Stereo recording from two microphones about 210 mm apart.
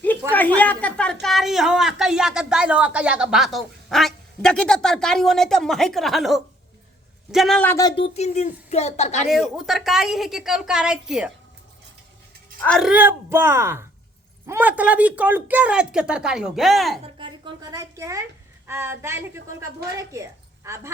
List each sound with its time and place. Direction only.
0.0 s a woman's voice: 10° left (ahead or behind); by 9.3 s 30° left (ahead or behind)
9.3 s speech: centre (ahead or behind)
12.6 s speech: 5° left (ahead or behind)
12.9 s a woman's voice: 10° right (ahead or behind)
17.2 s a sound: 20° right (ahead or behind)
18.7 s a woman's voice: 10° right (ahead or behind)